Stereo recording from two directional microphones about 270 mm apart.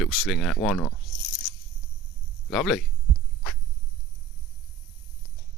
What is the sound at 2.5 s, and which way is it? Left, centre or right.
Speech, centre.